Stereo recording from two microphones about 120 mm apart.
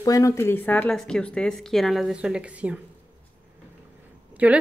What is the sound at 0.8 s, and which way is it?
A woman's voice, 5° left (ahead or behind).